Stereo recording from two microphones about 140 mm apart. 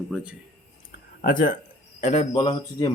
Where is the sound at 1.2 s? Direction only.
75° left (ahead or behind).